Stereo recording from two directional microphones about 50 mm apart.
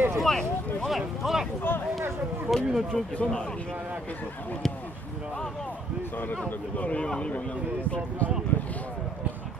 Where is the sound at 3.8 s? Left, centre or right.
Right.